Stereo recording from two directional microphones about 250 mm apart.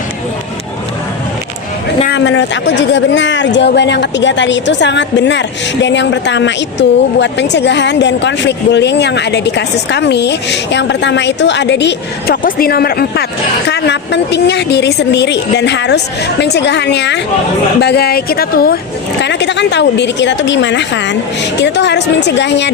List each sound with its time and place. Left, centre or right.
2.0 s speech: left